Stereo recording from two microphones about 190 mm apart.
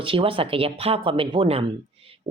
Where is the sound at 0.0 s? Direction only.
30° right (ahead or behind).